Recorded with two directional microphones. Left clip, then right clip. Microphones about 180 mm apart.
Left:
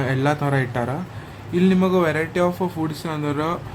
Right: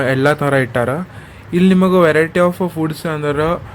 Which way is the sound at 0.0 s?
40° right (ahead or behind).